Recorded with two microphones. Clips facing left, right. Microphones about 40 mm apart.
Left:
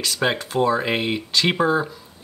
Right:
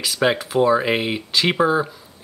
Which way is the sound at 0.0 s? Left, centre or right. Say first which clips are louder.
Right 3 dB; centre.